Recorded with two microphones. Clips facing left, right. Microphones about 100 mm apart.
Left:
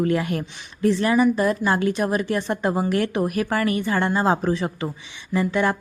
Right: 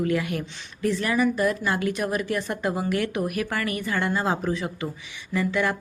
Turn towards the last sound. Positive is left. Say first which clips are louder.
# left 3 dB
turn(degrees=30)  # may be behind; listen again after turning